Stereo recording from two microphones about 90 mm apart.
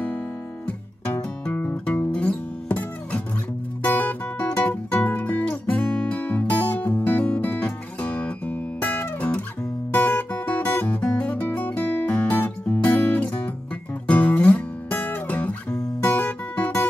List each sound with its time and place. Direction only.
0.7 s music: 20° left (ahead or behind)
16.0 s guitar: 20° left (ahead or behind)